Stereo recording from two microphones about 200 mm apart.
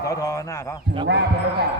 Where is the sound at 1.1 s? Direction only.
60° right (ahead or behind).